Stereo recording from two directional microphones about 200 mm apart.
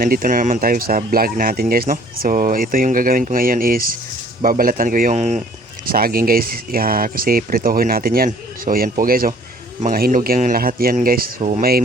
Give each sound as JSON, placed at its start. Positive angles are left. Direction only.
{"t": 0.0, "sound": "speech", "side_deg": -45}
{"t": 5.9, "sound": "speech", "side_deg": -50}